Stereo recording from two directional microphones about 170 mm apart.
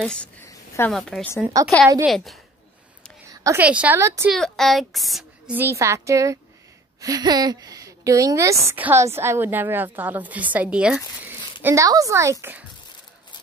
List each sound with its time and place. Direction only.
0.0 s a woman's voice: 5° left (ahead or behind)
3.4 s a woman's voice: 10° right (ahead or behind)
4.3 s a woman's voice: centre (ahead or behind)
5.5 s a woman's voice: 15° right (ahead or behind)
11.6 s a woman's voice: 20° right (ahead or behind)